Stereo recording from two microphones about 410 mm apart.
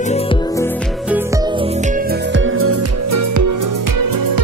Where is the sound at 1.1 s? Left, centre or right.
Centre.